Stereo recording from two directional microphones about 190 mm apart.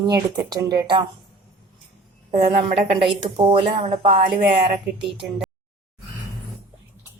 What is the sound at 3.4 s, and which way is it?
Speech, 25° right (ahead or behind).